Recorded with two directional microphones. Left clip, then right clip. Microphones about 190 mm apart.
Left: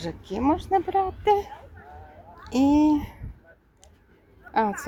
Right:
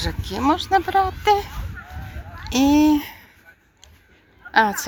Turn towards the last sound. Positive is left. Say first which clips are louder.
# right 7 dB
turn(degrees=5)  # may be behind; listen again after turning